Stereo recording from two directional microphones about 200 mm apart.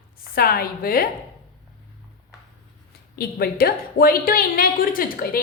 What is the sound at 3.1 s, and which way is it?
A woman's voice, 50° left (ahead or behind).